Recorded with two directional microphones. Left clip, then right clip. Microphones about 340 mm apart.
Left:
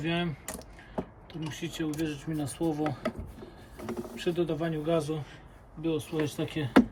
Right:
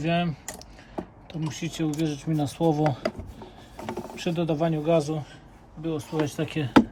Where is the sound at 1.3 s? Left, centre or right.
Centre.